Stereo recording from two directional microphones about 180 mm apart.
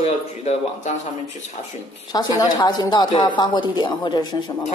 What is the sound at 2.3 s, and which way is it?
A woman's voice, 20° left (ahead or behind).